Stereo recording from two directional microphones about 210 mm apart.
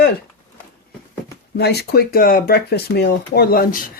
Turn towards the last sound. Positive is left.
turn(degrees=45)  # may be behind; listen again after turning